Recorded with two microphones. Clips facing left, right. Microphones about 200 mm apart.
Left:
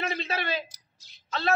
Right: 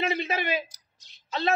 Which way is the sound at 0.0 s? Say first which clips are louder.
Right 3 dB; 15° right (ahead or behind).